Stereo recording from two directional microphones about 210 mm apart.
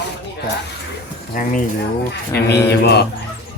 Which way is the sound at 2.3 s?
50° left (ahead or behind).